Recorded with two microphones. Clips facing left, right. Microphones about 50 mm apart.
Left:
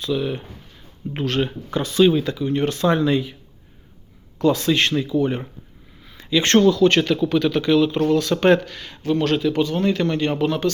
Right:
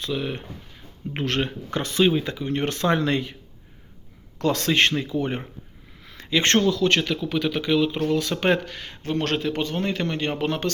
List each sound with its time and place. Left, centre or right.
0.0 s a man's voice: right
2.0 s speech: right
4.4 s speech: right
4.8 s a man's voice: right
6.0 s a sound: right
6.6 s speech: centre
7.3 s speech: centre; by 9.1 s right
9.1 s a man's voice: right
10.4 s a man's voice: right